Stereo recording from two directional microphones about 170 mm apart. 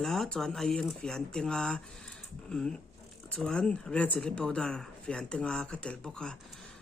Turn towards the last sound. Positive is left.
turn(degrees=5)  # may be behind; listen again after turning